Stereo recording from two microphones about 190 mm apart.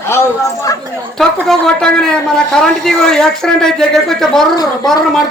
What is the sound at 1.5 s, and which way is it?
A man's voice, 5° left (ahead or behind).